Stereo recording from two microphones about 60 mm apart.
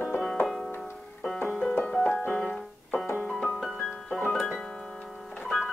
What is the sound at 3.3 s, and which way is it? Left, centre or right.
Piano, centre.